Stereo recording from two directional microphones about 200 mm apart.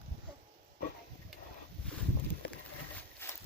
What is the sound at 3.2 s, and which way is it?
Horse, 10° left (ahead or behind).